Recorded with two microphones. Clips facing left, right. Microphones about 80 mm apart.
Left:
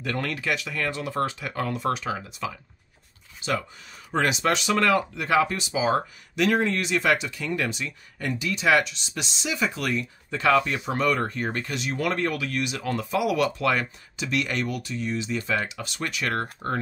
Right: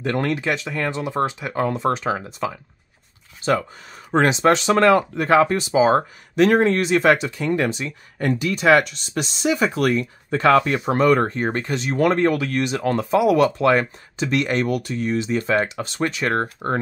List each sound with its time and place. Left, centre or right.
0.0 s speech: right
4.1 s speech: right
8.3 s speech: right
14.7 s speech: right